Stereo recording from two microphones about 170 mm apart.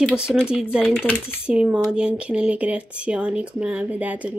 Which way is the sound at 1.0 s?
10° left (ahead or behind).